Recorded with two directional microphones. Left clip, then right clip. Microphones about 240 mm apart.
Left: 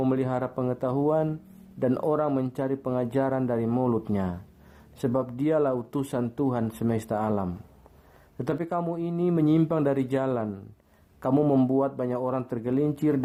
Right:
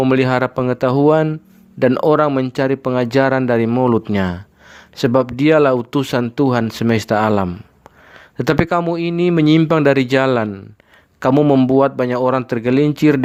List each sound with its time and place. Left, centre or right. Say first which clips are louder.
0.0 s speech: right 12 dB; right